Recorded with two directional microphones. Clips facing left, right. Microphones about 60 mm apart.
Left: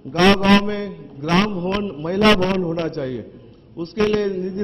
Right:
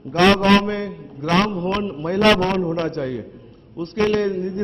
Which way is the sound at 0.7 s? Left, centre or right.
Right.